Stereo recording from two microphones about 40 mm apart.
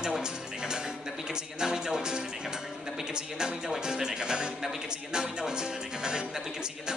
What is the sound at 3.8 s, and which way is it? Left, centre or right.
Speech, centre.